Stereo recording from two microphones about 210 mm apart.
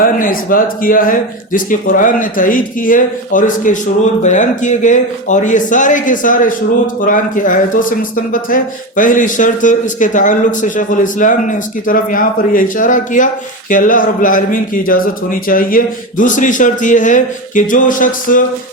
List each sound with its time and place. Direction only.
0.0 s speech: 40° left (ahead or behind)